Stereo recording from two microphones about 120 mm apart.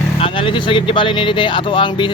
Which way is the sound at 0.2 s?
45° left (ahead or behind).